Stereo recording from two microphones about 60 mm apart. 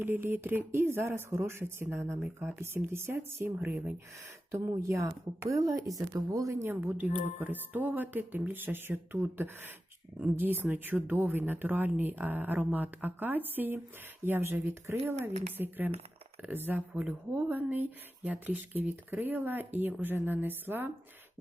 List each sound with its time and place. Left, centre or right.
0.0 s speech: right
5.5 s a woman's voice: right
6.7 s speech: right